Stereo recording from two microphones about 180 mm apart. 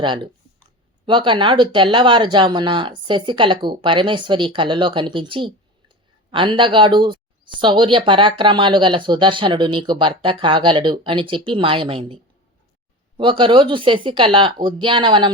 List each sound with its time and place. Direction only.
0.0 s speech: 25° right (ahead or behind)
13.1 s speech: 25° right (ahead or behind)